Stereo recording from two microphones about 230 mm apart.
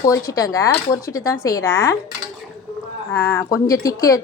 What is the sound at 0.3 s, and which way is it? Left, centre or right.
Speech, centre.